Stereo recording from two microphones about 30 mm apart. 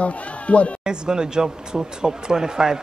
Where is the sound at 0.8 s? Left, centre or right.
Right.